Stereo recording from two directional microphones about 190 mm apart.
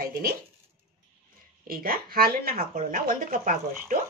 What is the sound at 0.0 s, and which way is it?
Speech, 55° right (ahead or behind).